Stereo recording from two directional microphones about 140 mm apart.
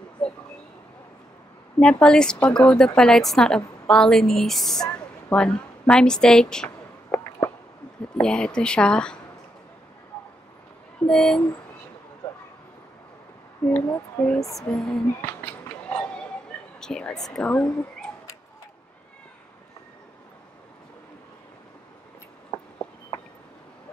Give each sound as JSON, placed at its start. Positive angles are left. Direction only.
{"t": 0.2, "sound": "a sound", "side_deg": 10}
{"t": 1.8, "sound": "a woman's voice", "side_deg": 5}
{"t": 4.9, "sound": "a sound", "side_deg": 5}
{"t": 8.2, "sound": "speech", "side_deg": 5}
{"t": 11.0, "sound": "speech", "side_deg": 5}
{"t": 13.8, "sound": "speech", "side_deg": 20}
{"t": 14.7, "sound": "a woman's voice", "side_deg": 5}
{"t": 15.9, "sound": "a sound", "side_deg": 5}
{"t": 16.8, "sound": "a woman's voice", "side_deg": 5}